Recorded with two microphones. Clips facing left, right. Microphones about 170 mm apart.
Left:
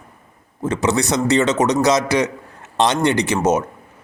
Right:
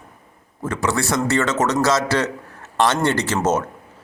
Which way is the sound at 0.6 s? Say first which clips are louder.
Left 3 dB; 20° left (ahead or behind).